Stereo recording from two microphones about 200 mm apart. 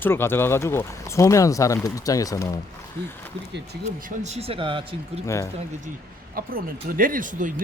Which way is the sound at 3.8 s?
35° right (ahead or behind).